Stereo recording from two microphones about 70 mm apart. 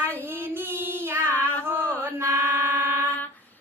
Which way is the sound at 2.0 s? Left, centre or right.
Right.